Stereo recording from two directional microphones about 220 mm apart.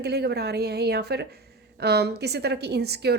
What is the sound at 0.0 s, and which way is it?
A woman's voice, 45° right (ahead or behind).